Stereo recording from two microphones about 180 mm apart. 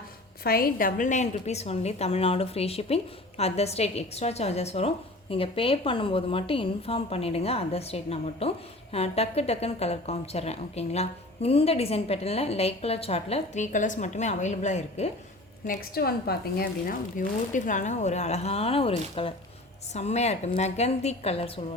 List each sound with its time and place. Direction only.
0.4 s a woman's voice: 55° left (ahead or behind); by 15.1 s 40° left (ahead or behind)
15.6 s a woman's voice: 55° left (ahead or behind); by 21.6 s 30° left (ahead or behind)